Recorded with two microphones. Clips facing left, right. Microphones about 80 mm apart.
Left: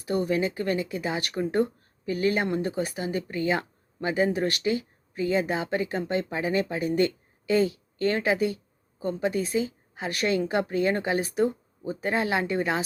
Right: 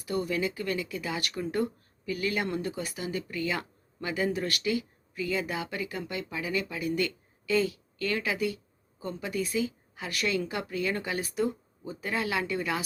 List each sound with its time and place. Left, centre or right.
0.0 s speech: left